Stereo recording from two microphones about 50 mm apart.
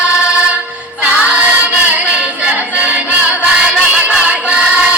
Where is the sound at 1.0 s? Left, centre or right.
Right.